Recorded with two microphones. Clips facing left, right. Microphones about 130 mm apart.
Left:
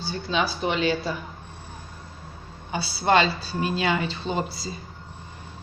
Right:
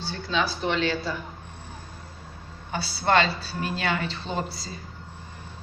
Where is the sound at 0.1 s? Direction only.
15° left (ahead or behind).